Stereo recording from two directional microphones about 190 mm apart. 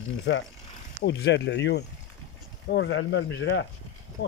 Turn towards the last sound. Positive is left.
turn(degrees=75)  # may be behind; listen again after turning